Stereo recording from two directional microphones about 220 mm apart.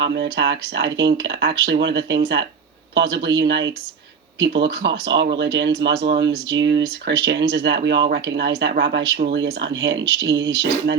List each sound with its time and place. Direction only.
0.0 s speech: 50° right (ahead or behind)